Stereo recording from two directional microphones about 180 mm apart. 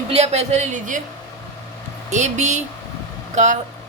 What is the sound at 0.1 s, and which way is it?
Speech, 35° right (ahead or behind).